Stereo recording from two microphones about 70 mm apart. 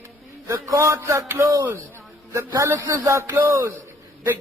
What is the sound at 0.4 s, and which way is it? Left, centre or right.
Speech, right.